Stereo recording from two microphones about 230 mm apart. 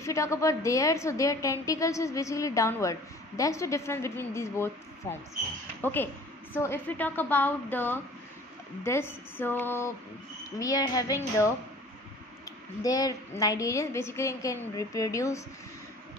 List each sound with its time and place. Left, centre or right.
0.0 s a woman's voice: centre
12.8 s a woman's voice: centre